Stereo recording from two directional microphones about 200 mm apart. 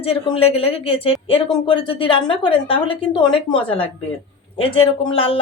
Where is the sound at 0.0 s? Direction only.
30° left (ahead or behind).